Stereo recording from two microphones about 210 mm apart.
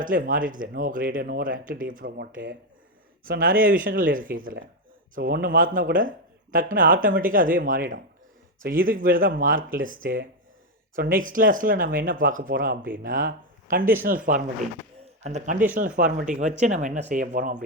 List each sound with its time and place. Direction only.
0.0 s speech: 40° right (ahead or behind)
15.0 s speech: 30° right (ahead or behind)